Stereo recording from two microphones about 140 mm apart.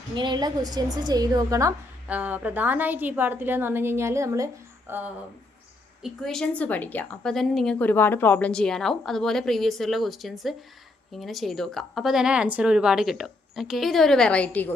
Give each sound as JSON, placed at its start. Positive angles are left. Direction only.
{"t": 0.2, "sound": "a woman's voice", "side_deg": -30}
{"t": 2.0, "sound": "a woman's voice", "side_deg": -10}
{"t": 6.0, "sound": "a woman's voice", "side_deg": 5}